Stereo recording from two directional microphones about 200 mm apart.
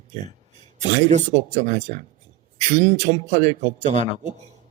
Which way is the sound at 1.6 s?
35° right (ahead or behind).